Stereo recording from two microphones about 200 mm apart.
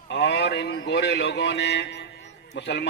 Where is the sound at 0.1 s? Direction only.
60° left (ahead or behind).